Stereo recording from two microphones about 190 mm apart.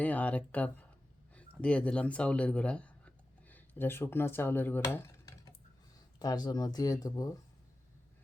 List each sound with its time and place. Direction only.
0.0 s speech: 10° left (ahead or behind)